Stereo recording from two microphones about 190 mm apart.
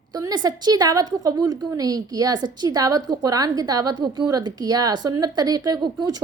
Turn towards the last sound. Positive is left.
turn(degrees=-20)  # may be behind; listen again after turning